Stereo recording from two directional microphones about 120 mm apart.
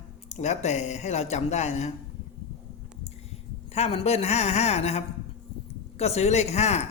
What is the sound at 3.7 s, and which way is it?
Speech, 60° left (ahead or behind).